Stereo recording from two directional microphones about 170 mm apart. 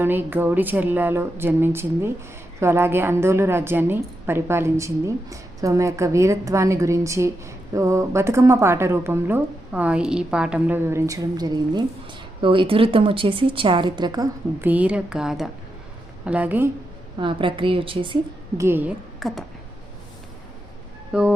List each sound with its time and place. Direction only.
0.0 s a woman's voice: 10° right (ahead or behind)
14.6 s a woman's voice: 10° right (ahead or behind)
17.2 s a woman's voice: 30° right (ahead or behind)
18.5 s a woman's voice: 15° right (ahead or behind)
19.2 s a sound: centre (ahead or behind)
21.1 s speech: 5° right (ahead or behind)